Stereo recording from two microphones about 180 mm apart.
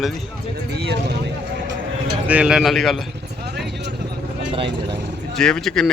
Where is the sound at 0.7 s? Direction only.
65° right (ahead or behind).